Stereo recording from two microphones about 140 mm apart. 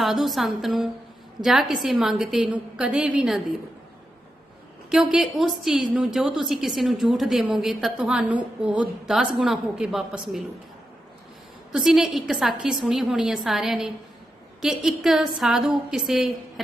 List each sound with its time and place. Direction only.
0.0 s a woman's voice: centre (ahead or behind)
4.9 s a woman's voice: 5° right (ahead or behind)
11.7 s a woman's voice: 5° right (ahead or behind)